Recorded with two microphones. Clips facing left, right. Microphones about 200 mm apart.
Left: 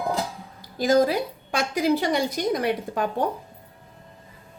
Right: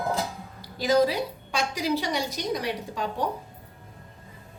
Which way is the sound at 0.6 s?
50° left (ahead or behind).